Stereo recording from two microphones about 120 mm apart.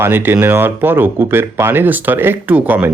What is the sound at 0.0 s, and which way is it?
Speech, 15° right (ahead or behind).